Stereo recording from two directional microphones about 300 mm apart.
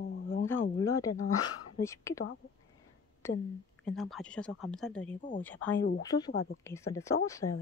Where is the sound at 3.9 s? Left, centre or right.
Centre.